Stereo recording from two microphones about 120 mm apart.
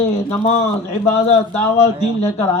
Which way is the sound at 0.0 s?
65° left (ahead or behind).